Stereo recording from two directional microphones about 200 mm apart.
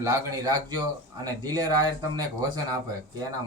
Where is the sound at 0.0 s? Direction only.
15° right (ahead or behind).